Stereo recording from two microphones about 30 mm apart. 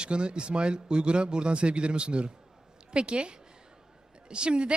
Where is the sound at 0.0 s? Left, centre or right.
Right.